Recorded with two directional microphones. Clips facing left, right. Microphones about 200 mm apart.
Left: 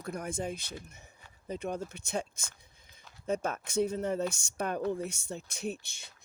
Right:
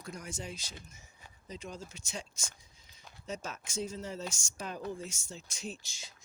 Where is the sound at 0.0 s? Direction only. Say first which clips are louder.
Left 7 dB; 60° left (ahead or behind).